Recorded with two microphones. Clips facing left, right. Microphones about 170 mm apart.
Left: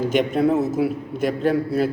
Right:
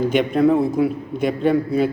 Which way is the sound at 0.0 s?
5° left (ahead or behind).